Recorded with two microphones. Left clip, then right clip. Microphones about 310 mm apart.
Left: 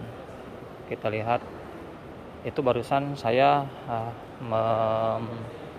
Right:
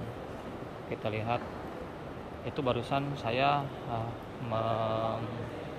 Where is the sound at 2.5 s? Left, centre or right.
Centre.